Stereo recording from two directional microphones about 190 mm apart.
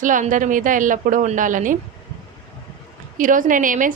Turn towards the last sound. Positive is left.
turn(degrees=-45)  # may be behind; listen again after turning